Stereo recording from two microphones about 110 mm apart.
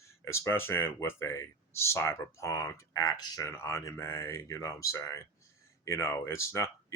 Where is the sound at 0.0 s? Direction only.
25° left (ahead or behind).